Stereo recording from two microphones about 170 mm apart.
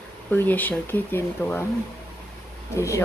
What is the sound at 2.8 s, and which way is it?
Speech, 15° left (ahead or behind).